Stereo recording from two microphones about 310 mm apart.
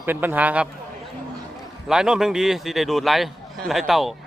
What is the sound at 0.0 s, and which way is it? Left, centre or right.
Speech, centre.